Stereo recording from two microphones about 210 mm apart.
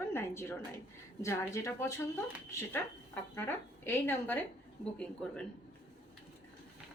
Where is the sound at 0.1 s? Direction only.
10° left (ahead or behind).